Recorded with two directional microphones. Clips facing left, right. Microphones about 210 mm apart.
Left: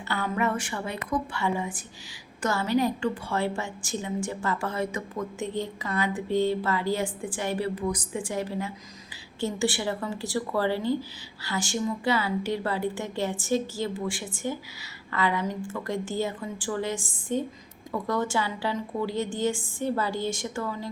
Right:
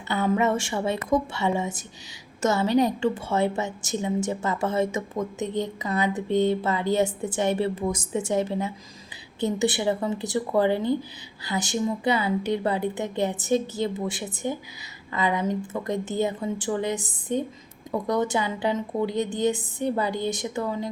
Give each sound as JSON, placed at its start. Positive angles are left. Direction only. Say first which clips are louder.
{"t": 0.1, "sound": "a woman's voice", "louder": "right 5 dB", "side_deg": -20}